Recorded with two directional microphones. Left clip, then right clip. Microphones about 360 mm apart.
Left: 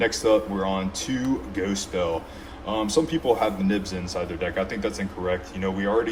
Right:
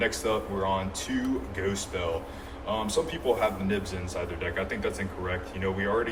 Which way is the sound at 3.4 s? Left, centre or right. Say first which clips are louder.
Left 3 dB; centre.